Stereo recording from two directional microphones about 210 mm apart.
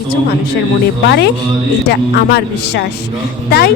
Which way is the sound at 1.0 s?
55° left (ahead or behind).